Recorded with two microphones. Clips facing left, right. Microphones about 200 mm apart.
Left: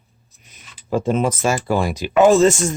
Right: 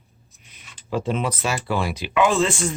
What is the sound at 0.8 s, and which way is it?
Speech, 45° left (ahead or behind).